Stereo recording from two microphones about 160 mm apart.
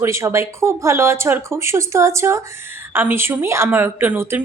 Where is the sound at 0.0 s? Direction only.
20° right (ahead or behind).